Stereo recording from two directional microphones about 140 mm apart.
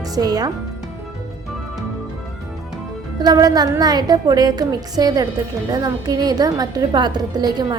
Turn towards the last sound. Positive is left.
turn(degrees=-30)  # may be behind; listen again after turning